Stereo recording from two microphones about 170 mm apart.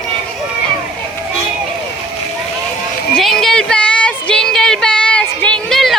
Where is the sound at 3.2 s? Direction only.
Centre (ahead or behind).